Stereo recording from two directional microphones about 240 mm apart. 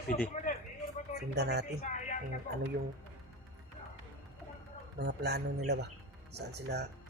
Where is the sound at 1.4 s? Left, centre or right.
Right.